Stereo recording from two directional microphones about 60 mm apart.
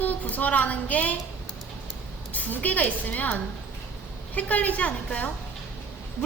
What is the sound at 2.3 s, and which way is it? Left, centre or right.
A woman's voice, left.